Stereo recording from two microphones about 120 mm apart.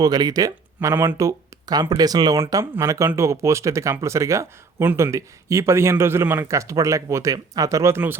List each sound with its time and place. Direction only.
0.0 s speech: 35° right (ahead or behind)